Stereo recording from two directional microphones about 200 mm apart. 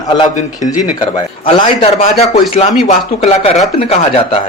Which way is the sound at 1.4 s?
30° left (ahead or behind).